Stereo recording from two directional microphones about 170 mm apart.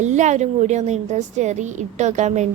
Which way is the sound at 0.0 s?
45° right (ahead or behind).